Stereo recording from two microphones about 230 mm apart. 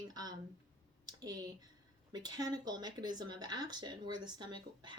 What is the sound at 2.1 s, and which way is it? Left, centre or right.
Speech, centre.